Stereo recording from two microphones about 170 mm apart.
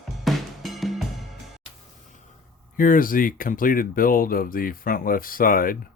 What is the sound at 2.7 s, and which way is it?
Speech, 55° left (ahead or behind).